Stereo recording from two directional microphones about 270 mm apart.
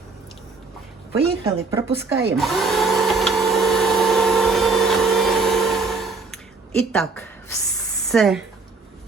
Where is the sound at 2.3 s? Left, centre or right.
Centre.